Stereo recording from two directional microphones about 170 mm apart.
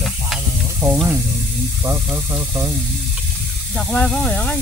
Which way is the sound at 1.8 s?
15° right (ahead or behind).